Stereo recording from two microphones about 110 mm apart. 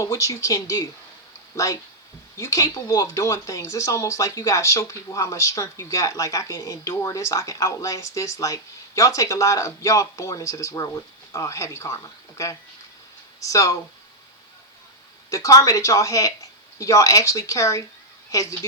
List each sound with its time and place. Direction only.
0.0 s speech: 30° left (ahead or behind)
15.3 s a woman's voice: 30° left (ahead or behind)